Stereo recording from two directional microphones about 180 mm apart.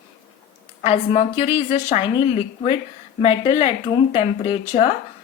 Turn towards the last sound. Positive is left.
turn(degrees=35)  # may be behind; listen again after turning